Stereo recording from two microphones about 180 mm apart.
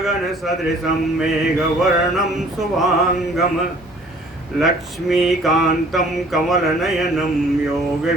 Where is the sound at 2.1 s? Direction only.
Centre (ahead or behind).